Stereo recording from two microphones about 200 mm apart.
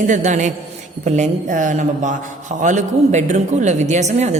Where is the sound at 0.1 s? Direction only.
35° right (ahead or behind).